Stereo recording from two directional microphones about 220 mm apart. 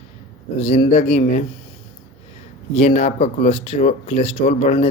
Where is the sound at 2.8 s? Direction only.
30° left (ahead or behind).